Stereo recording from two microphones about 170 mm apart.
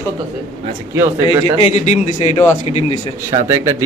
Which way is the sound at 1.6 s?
40° left (ahead or behind).